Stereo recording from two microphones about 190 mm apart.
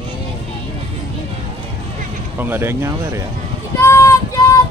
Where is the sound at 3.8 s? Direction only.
15° left (ahead or behind).